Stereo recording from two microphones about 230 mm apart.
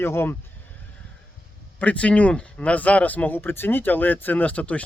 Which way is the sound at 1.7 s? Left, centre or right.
Centre.